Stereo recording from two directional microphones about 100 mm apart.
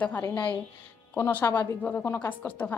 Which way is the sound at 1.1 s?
25° left (ahead or behind).